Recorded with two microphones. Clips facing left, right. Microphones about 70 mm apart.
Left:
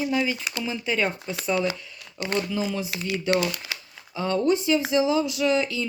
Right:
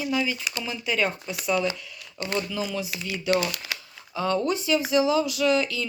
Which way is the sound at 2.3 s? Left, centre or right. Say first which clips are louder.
Left 2 dB; left.